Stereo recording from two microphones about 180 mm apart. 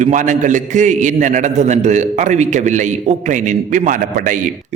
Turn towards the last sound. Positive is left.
turn(degrees=-45)  # may be behind; listen again after turning